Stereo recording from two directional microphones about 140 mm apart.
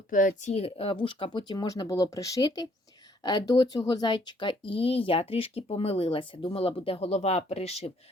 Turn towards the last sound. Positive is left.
turn(degrees=50)  # may be behind; listen again after turning